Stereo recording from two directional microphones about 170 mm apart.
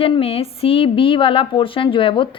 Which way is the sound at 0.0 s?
35° left (ahead or behind).